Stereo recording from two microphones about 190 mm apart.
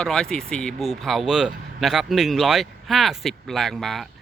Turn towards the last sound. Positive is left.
turn(degrees=0)  # may be behind; listen again after turning